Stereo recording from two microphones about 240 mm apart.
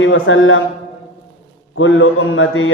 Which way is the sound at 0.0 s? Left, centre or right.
Left.